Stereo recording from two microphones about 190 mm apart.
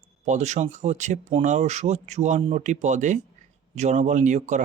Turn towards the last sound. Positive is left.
turn(degrees=-40)  # may be behind; listen again after turning